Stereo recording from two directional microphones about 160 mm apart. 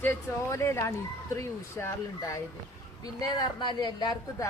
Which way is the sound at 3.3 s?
25° left (ahead or behind).